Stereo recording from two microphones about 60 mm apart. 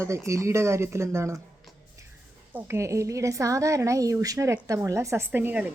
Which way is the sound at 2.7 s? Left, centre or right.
Right.